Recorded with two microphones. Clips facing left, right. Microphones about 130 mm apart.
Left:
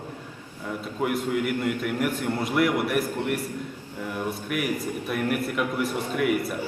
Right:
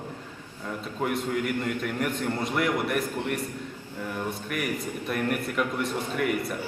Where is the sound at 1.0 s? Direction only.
5° left (ahead or behind).